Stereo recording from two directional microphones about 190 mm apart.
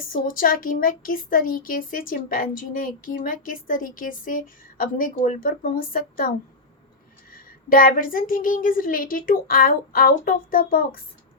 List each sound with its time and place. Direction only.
0.1 s speech: 45° left (ahead or behind)